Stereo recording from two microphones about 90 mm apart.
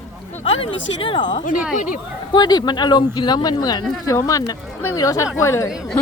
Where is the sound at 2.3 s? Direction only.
50° left (ahead or behind).